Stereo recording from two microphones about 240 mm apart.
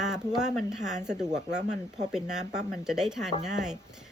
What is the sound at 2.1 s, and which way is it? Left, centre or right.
Speech, centre.